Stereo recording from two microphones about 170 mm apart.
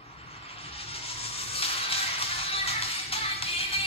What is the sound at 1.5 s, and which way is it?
Music, 35° left (ahead or behind).